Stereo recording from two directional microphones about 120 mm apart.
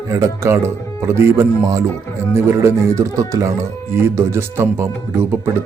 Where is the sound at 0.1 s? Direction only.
25° right (ahead or behind).